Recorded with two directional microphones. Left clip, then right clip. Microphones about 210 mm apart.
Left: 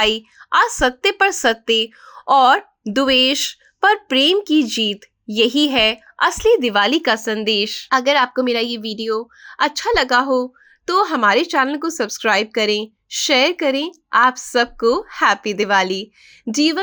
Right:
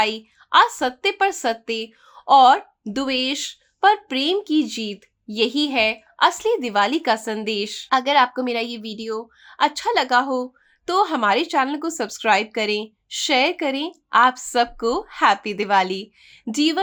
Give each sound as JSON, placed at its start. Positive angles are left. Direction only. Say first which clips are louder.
{"t": 0.0, "sound": "a woman's voice", "louder": "left 4 dB", "side_deg": 20}